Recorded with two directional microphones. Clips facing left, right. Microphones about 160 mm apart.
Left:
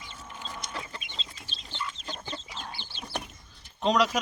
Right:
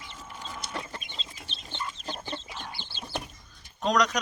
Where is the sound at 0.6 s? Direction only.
35° right (ahead or behind).